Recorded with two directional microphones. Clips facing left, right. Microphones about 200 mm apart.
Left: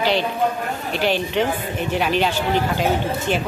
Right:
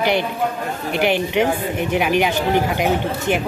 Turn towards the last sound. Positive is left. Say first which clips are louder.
# right 1 dB
turn(degrees=-15)  # may be behind; listen again after turning